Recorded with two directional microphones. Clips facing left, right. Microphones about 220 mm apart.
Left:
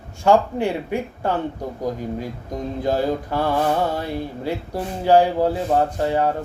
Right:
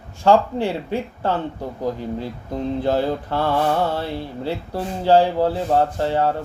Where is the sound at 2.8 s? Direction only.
15° left (ahead or behind).